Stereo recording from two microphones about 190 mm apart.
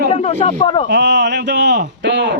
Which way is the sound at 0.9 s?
65° right (ahead or behind).